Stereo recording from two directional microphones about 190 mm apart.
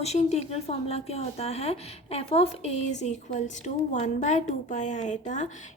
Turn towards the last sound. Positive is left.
turn(degrees=40)  # may be behind; listen again after turning